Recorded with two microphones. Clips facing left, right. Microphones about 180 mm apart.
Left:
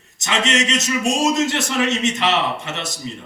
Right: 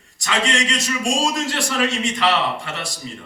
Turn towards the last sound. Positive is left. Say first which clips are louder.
# left 2 dB
turn(degrees=20)  # may be behind; listen again after turning